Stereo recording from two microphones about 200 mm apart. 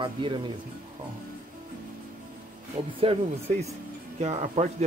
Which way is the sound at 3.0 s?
30° right (ahead or behind).